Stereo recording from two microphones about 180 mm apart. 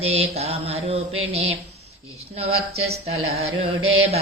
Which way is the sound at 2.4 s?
35° right (ahead or behind).